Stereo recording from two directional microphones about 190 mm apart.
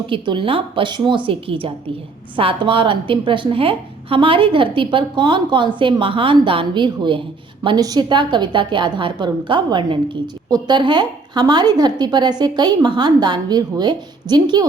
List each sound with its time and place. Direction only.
0.1 s a woman's voice: 25° right (ahead or behind)